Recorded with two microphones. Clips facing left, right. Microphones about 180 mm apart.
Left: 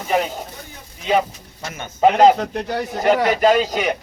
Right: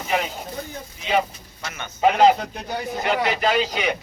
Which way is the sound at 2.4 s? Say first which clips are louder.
Left 6 dB; 75° left (ahead or behind).